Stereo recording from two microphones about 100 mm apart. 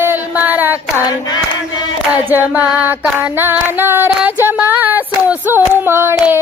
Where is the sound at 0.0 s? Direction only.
20° right (ahead or behind).